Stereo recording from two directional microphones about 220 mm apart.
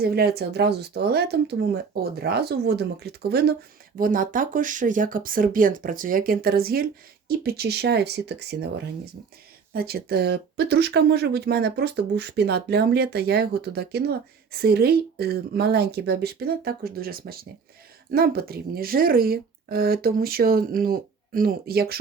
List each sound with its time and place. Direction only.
0.0 s speech: 45° right (ahead or behind)
9.7 s speech: 45° right (ahead or behind)